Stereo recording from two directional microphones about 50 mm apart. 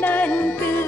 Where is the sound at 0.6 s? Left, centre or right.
Left.